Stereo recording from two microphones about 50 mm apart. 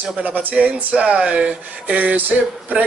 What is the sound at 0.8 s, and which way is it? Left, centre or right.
Speech, right.